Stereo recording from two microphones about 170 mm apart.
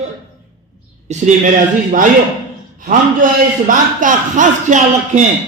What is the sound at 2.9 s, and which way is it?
A man's voice, 50° right (ahead or behind).